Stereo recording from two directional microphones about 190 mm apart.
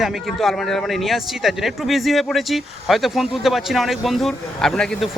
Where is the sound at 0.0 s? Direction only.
Centre (ahead or behind).